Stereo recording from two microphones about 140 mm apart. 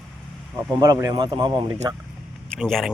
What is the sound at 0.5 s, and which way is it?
Speech, 25° right (ahead or behind).